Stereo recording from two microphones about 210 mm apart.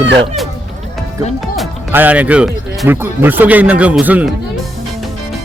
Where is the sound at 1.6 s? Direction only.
5° right (ahead or behind).